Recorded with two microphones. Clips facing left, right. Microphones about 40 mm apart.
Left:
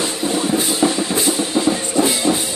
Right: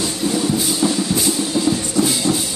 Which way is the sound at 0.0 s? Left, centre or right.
Left.